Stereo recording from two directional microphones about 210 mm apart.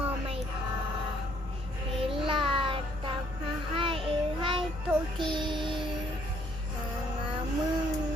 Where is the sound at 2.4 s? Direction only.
25° right (ahead or behind).